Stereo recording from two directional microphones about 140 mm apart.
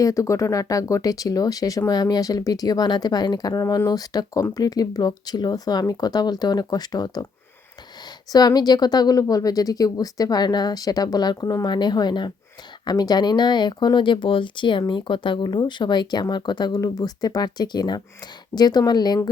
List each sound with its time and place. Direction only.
0.0 s speech: 20° left (ahead or behind)
8.3 s speech: 30° left (ahead or behind)